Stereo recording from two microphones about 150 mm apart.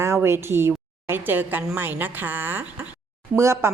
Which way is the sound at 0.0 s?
15° right (ahead or behind).